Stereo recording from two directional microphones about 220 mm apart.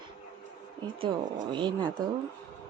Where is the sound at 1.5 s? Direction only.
20° right (ahead or behind).